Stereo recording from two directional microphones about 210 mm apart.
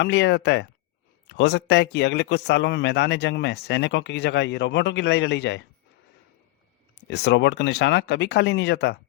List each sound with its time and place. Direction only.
0.0 s a man's voice: 55° left (ahead or behind)
7.1 s a man's voice: 55° left (ahead or behind)